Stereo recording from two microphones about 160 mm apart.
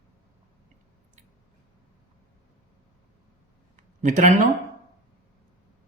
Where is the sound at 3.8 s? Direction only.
50° right (ahead or behind).